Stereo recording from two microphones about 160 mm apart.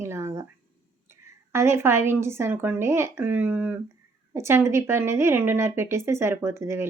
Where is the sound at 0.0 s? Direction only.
15° right (ahead or behind).